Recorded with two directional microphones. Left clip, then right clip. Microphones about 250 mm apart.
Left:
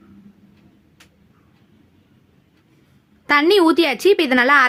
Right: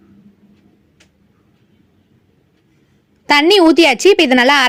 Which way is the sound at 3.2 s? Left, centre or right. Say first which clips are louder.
Right 4 dB; centre.